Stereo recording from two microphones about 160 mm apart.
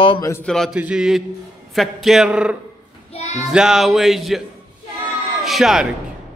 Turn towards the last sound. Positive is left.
turn(degrees=0)  # may be behind; listen again after turning